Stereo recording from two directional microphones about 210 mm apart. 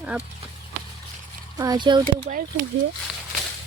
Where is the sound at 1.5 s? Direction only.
20° right (ahead or behind).